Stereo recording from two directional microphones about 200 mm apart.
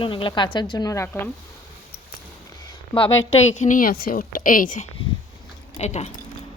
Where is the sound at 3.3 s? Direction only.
35° left (ahead or behind).